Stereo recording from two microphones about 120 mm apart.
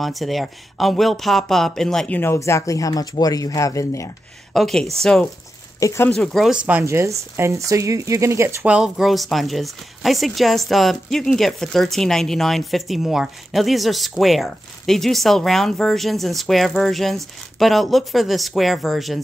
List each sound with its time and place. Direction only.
0.0 s speech: centre (ahead or behind)
2.1 s speech: 20° left (ahead or behind)
4.6 s speech: centre (ahead or behind)
5.8 s speech: 25° left (ahead or behind)
6.0 s speech: 5° left (ahead or behind)
6.8 s speech: 25° right (ahead or behind)
8.6 s speech: 5° right (ahead or behind)